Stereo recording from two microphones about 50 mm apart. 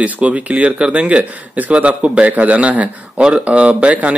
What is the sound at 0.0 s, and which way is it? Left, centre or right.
Speech, right.